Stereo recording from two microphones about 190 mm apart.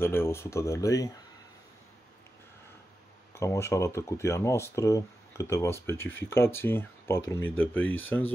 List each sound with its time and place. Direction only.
0.0 s speech: 10° left (ahead or behind)
3.3 s speech: 15° left (ahead or behind)
7.8 s speech: 90° left